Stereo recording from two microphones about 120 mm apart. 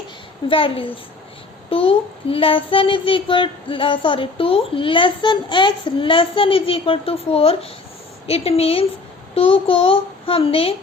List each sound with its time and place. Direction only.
0.4 s a child's voice: 50° left (ahead or behind)